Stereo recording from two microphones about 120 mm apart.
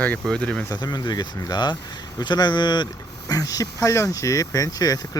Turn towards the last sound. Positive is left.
turn(degrees=30)  # may be behind; listen again after turning